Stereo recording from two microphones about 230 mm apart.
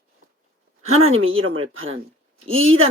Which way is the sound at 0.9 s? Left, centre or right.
Right.